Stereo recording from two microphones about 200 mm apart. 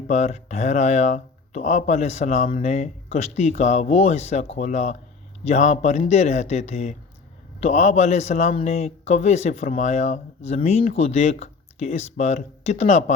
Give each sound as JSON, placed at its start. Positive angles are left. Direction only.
{"t": 0.1, "sound": "speech", "side_deg": 35}